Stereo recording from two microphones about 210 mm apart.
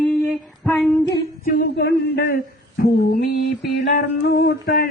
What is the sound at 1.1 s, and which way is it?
Speech, 45° left (ahead or behind).